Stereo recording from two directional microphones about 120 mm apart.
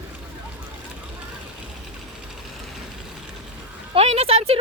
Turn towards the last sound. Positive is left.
turn(degrees=-55)  # may be behind; listen again after turning